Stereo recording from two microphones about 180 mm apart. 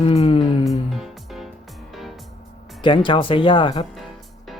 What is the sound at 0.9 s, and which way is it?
Music, centre (ahead or behind).